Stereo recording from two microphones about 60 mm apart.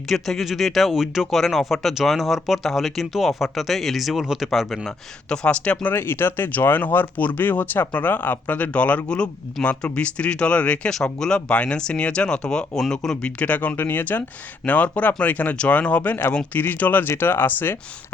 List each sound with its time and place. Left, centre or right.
0.1 s speech: centre
5.9 s speech: left; by 13.3 s centre
13.4 s speech: left